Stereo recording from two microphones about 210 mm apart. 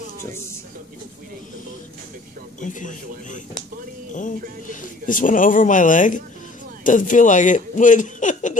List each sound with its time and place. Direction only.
2.6 s speech: 35° left (ahead or behind)